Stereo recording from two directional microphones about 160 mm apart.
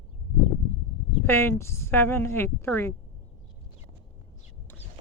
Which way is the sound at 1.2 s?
15° left (ahead or behind).